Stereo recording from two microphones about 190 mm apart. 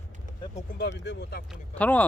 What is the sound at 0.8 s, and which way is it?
Speech, 65° left (ahead or behind).